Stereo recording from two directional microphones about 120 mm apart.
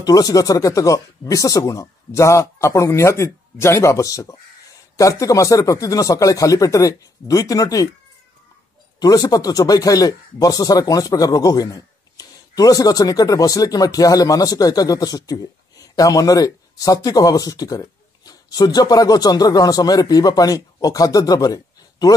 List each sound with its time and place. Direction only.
0.0 s speech: 35° left (ahead or behind)
9.0 s speech: 30° left (ahead or behind)